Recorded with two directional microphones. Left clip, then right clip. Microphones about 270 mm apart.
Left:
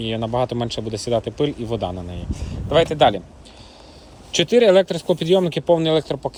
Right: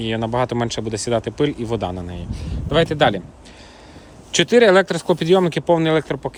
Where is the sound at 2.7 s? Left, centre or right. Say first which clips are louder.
Left 1 dB; centre.